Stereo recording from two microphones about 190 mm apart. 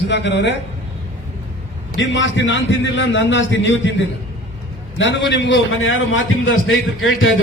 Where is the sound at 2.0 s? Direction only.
75° left (ahead or behind); by 6.8 s 90° left.